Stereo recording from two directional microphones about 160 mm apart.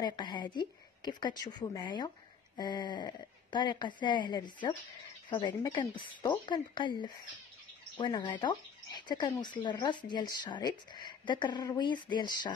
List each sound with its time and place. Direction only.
0.0 s speech: 30° left (ahead or behind)